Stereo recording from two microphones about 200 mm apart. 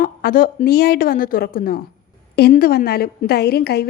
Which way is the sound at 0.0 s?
45° left (ahead or behind).